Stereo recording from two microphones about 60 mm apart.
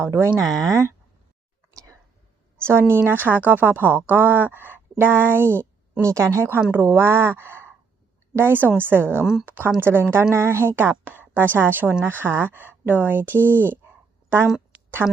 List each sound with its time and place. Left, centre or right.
0.0 s speech: right
0.4 s speech: right
2.6 s speech: right
6.0 s speech: right
6.5 s speech: right
9.2 s speech: centre
9.5 s speech: right
14.7 s a sound: right